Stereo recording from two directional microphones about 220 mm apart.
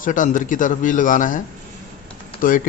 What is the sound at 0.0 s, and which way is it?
A man's voice, 35° left (ahead or behind).